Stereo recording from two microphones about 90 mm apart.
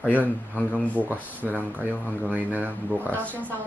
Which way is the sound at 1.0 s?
20° right (ahead or behind).